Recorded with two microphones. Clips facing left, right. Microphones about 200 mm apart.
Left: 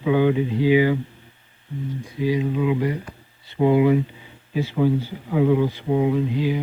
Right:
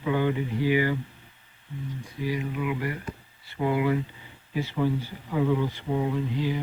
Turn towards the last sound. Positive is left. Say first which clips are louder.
# left 6 dB
turn(degrees=15)  # may be behind; listen again after turning